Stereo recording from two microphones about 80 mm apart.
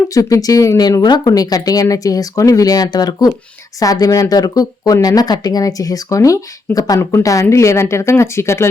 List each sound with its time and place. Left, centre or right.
0.1 s speech: left